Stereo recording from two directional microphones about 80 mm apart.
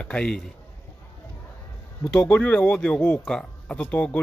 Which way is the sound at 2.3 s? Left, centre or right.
Centre.